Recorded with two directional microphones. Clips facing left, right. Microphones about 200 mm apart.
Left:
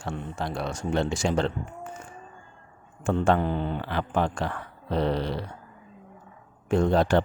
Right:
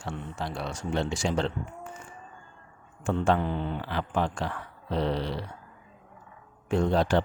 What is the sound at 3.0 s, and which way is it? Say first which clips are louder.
Speech: left 2 dB; 50° left (ahead or behind).